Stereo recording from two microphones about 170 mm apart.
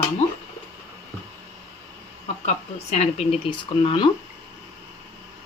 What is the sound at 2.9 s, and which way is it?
Speech, 40° left (ahead or behind).